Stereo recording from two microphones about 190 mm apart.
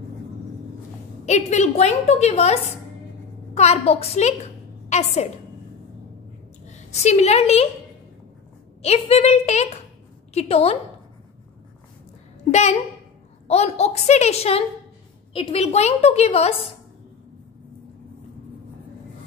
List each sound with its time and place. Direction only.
1.2 s a woman's voice: 40° left (ahead or behind)
6.7 s a woman's voice: 35° left (ahead or behind)
8.8 s a woman's voice: 35° left (ahead or behind)
12.4 s a woman's voice: 35° left (ahead or behind)